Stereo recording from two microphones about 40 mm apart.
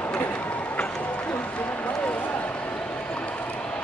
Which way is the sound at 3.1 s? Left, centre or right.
Left.